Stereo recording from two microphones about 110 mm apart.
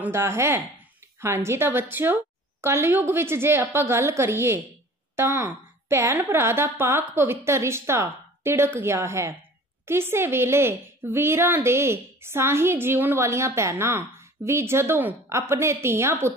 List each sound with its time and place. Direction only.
0.0 s a woman's voice: 20° right (ahead or behind)